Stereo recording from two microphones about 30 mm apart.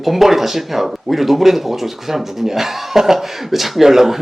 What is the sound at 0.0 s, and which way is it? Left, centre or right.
Speech, centre.